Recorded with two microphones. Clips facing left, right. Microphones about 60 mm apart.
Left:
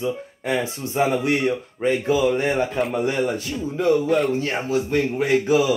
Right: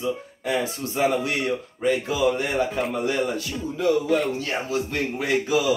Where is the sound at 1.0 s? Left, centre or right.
Left.